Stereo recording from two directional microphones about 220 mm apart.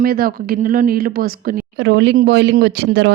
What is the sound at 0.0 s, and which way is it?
Speech, 40° right (ahead or behind).